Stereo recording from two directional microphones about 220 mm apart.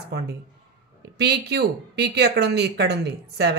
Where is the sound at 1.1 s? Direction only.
50° right (ahead or behind).